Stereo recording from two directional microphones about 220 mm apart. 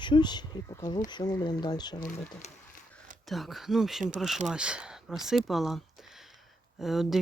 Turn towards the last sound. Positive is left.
turn(degrees=0)  # may be behind; listen again after turning